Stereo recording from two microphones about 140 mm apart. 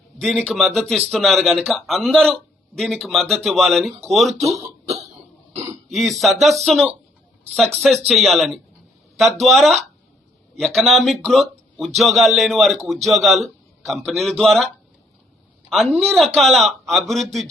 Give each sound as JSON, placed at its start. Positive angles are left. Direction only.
{"t": 0.2, "sound": "a man's voice", "side_deg": 0}
{"t": 4.4, "sound": "speech", "side_deg": -50}
{"t": 5.9, "sound": "a man's voice", "side_deg": 0}
{"t": 16.0, "sound": "a man's voice", "side_deg": 0}